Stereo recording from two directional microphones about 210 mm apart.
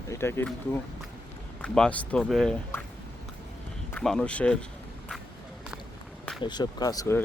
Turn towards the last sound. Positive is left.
turn(degrees=15)  # may be behind; listen again after turning